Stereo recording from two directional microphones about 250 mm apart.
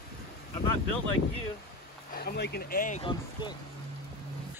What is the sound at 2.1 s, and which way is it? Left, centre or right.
Speech, left.